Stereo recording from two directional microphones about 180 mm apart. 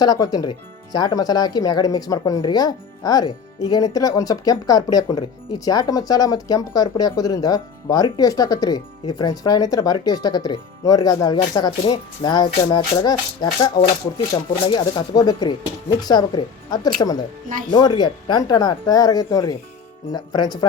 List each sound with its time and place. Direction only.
0.0 s speech: 20° left (ahead or behind)
14.7 s speech: 25° left (ahead or behind)